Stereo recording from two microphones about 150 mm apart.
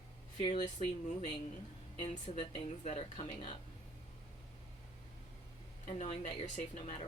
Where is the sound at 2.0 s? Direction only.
50° left (ahead or behind).